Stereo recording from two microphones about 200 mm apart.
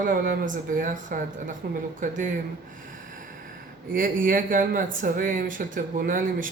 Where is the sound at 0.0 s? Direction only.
45° right (ahead or behind).